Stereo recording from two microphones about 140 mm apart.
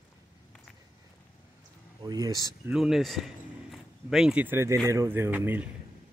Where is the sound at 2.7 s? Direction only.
5° right (ahead or behind).